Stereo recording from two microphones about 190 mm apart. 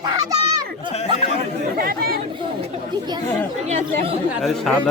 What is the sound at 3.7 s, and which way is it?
Speech, 40° right (ahead or behind).